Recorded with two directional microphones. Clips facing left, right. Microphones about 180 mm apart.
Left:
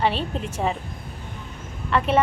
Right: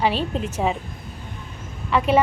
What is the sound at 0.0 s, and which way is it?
Speech, centre (ahead or behind).